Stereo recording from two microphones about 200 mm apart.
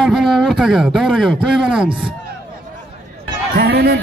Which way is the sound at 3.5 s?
55° right (ahead or behind).